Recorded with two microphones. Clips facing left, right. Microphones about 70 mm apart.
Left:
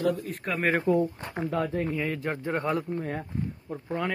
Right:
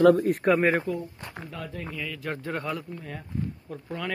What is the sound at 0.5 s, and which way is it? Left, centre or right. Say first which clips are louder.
Speech: right 3 dB; centre.